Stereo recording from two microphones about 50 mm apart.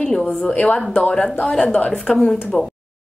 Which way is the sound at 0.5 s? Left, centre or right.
Left.